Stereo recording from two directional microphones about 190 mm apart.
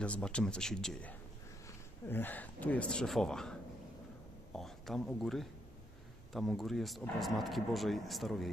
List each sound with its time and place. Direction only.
0.0 s speech: 5° left (ahead or behind)
4.6 s speech: centre (ahead or behind)